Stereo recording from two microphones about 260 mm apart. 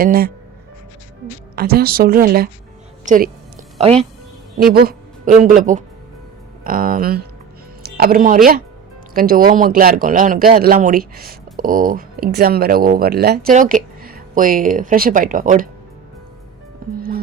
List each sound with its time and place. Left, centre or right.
0.0 s speech: right
1.5 s speech: right
4.5 s speech: right
7.8 s music: right
9.1 s speech: right
16.8 s music: right